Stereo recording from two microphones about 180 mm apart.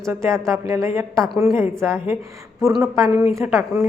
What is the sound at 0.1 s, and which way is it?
Speech, 15° right (ahead or behind).